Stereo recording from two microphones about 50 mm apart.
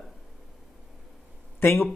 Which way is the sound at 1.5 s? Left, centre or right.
Left.